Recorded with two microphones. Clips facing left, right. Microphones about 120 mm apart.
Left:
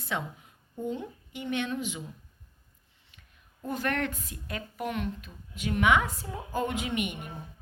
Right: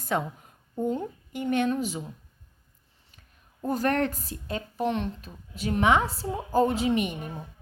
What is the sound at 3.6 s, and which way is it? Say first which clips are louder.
A woman's voice: right 5 dB; 40° right (ahead or behind).